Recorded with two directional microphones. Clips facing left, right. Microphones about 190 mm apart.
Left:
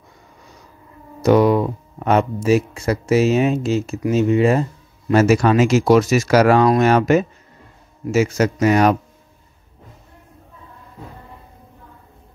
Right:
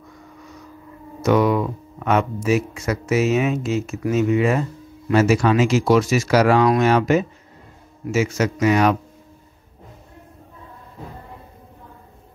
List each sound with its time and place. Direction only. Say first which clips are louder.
1.2 s speech: left 4 dB; 35° left (ahead or behind)